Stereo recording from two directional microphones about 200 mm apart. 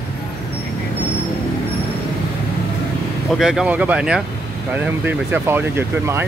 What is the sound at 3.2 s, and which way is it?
Speech, centre (ahead or behind).